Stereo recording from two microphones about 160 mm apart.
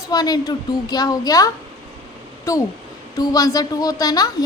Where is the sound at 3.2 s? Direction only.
25° left (ahead or behind).